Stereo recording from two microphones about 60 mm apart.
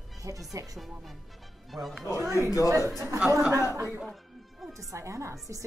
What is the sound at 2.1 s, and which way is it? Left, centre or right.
Speech, right.